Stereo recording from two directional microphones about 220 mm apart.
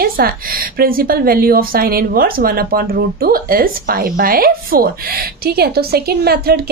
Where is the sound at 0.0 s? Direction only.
40° right (ahead or behind).